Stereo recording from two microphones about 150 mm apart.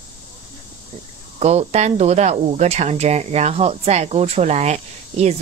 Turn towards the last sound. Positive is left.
turn(degrees=-45)  # may be behind; listen again after turning